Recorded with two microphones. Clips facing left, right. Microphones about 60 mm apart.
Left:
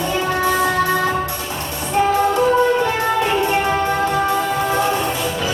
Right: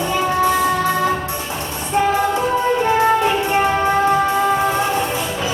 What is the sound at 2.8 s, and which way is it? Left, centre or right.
Music, right.